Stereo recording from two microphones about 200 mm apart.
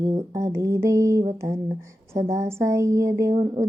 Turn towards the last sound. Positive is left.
turn(degrees=-15)  # may be behind; listen again after turning